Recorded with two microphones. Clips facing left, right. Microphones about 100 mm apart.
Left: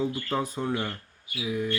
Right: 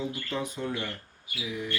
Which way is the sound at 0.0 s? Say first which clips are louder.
Left 4 dB; 40° left (ahead or behind).